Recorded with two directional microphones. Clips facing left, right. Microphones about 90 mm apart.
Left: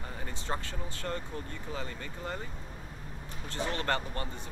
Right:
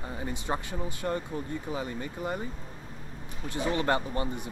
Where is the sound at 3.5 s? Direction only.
15° right (ahead or behind).